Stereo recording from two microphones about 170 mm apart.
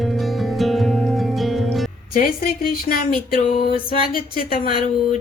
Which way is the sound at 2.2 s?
60° left (ahead or behind).